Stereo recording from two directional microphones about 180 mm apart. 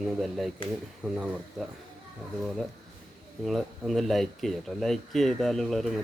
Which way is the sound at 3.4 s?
Centre (ahead or behind).